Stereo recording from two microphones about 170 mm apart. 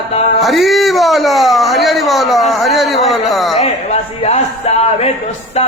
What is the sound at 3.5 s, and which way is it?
A man's voice, 40° left (ahead or behind).